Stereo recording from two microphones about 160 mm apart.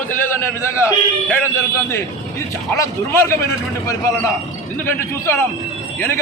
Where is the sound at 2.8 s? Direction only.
15° left (ahead or behind).